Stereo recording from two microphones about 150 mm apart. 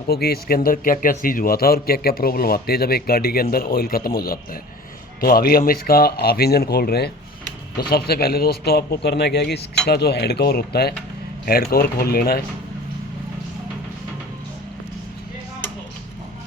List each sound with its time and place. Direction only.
0.1 s a man's voice: 90° left